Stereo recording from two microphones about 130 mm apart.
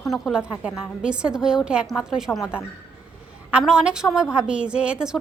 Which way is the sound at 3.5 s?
5° right (ahead or behind).